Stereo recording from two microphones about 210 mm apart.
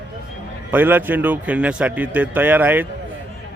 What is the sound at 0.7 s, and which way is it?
Speech, 10° right (ahead or behind).